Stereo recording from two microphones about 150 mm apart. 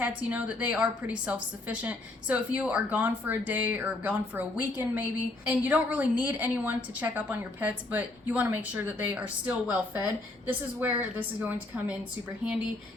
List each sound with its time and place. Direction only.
0.0 s a woman's voice: 10° right (ahead or behind)